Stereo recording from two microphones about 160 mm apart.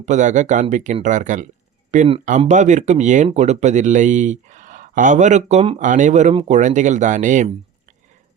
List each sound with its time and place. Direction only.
0.0 s speech: 50° right (ahead or behind)